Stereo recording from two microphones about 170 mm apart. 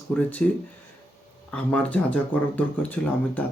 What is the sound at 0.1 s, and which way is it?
Speech, 10° left (ahead or behind).